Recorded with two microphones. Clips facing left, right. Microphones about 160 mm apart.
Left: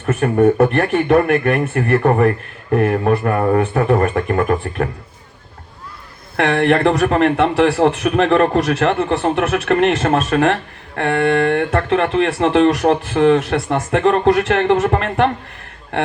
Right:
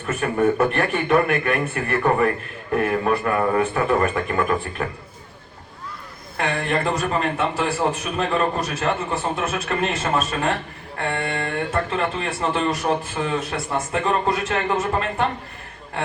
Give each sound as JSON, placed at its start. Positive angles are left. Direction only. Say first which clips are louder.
{"t": 0.1, "sound": "a man's voice", "louder": "left 6 dB", "side_deg": 45}
{"t": 6.3, "sound": "speech", "louder": "left 9 dB", "side_deg": 75}